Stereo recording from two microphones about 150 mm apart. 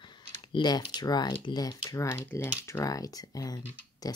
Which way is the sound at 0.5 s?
30° left (ahead or behind).